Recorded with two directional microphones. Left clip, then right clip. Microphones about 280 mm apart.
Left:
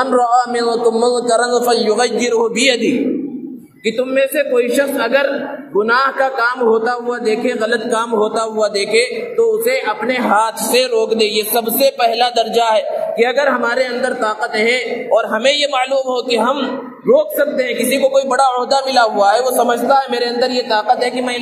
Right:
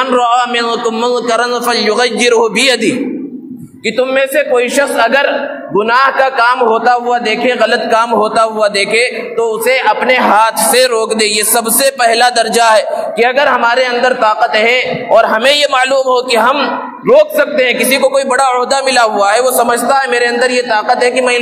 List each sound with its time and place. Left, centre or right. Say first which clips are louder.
0.7 s a man's voice: right 1 dB; right
1.7 s a man's voice: right 3 dB; right
4.0 s a man's voice: right 4 dB; right